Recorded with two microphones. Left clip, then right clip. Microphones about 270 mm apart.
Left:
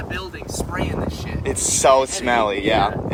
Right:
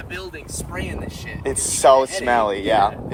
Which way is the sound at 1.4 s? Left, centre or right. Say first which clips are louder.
Right 1 dB; centre.